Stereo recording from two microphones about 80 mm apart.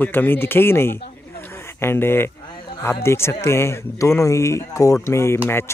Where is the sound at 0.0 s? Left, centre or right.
Left.